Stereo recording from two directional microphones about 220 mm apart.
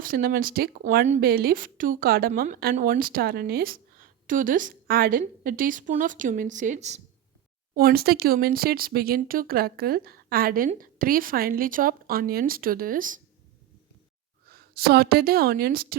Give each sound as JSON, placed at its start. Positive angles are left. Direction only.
{"t": 0.0, "sound": "speech", "side_deg": -40}
{"t": 7.7, "sound": "speech", "side_deg": -45}
{"t": 14.4, "sound": "speech", "side_deg": -45}